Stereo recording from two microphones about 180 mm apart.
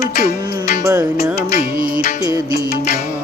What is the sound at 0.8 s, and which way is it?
Music, 15° right (ahead or behind).